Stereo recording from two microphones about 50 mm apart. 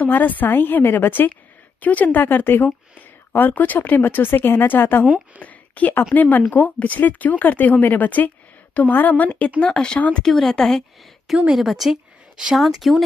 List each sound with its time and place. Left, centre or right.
0.1 s speech: left
5.0 s a woman's voice: right
5.4 s speech: left
9.6 s speech: centre
9.9 s speech: left
10.2 s speech: centre
11.5 s a woman's voice: centre